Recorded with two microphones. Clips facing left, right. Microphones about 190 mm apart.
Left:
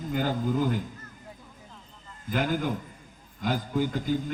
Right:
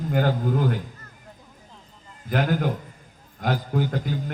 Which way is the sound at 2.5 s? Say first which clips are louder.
Right 4 dB; 50° right (ahead or behind).